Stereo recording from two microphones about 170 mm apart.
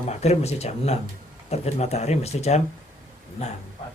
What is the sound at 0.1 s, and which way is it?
Speech, 40° left (ahead or behind).